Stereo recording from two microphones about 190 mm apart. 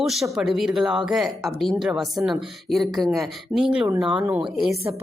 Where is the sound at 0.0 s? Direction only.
Centre (ahead or behind).